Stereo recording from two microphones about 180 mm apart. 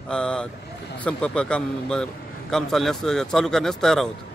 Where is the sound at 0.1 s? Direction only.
5° left (ahead or behind).